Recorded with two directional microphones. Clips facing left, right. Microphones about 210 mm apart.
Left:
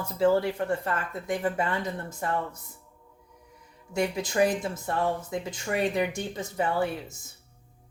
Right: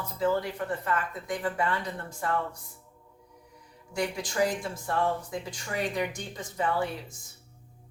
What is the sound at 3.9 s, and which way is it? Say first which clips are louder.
Speech: left 4 dB; 25° left (ahead or behind).